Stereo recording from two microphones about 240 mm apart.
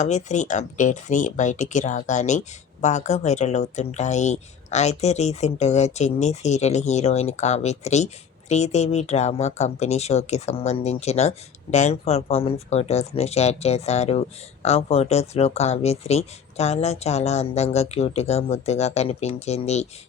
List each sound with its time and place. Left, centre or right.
0.0 s speech: left